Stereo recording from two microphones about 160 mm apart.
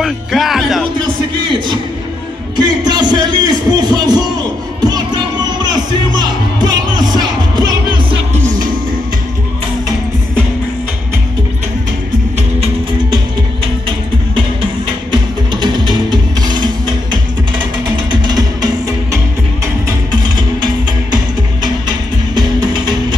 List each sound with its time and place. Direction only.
0.0 s speech: centre (ahead or behind)
2.5 s a man's voice: 25° right (ahead or behind)
4.8 s music: 25° right (ahead or behind)
15.0 s music: 30° right (ahead or behind)
19.9 s music: 25° right (ahead or behind)